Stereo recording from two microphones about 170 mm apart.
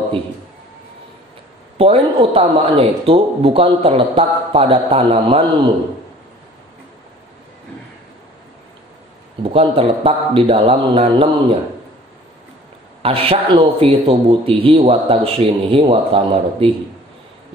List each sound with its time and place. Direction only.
1.8 s speech: 35° right (ahead or behind)
9.4 s speech: 35° right (ahead or behind)
13.0 s speech: 35° right (ahead or behind)